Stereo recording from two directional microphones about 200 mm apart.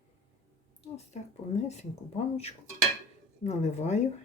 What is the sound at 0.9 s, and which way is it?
Speech, 35° left (ahead or behind).